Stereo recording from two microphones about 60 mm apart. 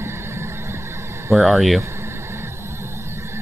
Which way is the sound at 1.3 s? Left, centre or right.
Centre.